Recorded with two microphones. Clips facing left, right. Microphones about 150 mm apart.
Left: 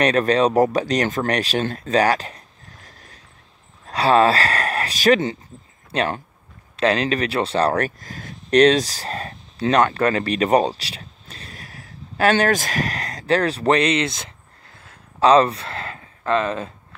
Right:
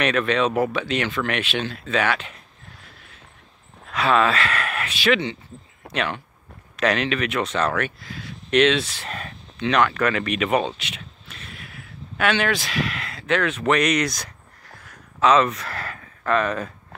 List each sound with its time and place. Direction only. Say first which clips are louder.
0.0 s speech: left 4 dB; 35° left (ahead or behind)